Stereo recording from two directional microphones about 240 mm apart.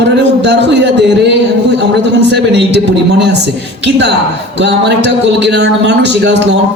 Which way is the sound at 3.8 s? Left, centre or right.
Right.